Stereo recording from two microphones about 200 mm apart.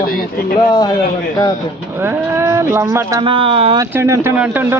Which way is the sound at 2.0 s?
10° right (ahead or behind).